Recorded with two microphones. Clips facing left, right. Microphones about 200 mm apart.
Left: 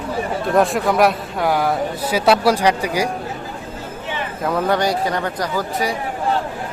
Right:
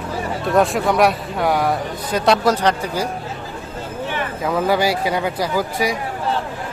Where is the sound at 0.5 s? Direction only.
Centre (ahead or behind).